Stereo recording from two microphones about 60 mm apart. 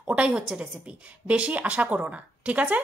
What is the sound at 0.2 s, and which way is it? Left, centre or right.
A woman's voice, centre.